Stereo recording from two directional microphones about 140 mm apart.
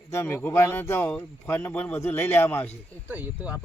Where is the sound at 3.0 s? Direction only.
10° right (ahead or behind).